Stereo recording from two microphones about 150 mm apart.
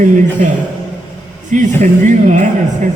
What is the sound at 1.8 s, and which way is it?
Speech, 55° right (ahead or behind).